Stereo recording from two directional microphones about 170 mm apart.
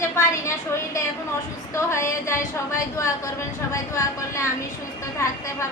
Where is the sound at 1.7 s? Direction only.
15° left (ahead or behind).